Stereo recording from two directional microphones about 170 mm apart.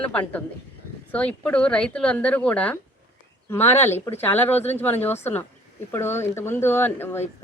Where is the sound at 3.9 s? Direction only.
15° left (ahead or behind).